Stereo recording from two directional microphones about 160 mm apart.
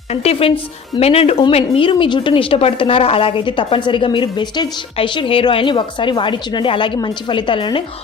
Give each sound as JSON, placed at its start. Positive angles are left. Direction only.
{"t": 0.1, "sound": "a woman's voice", "side_deg": 40}